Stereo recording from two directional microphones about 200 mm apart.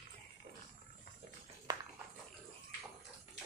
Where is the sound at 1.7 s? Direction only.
20° right (ahead or behind).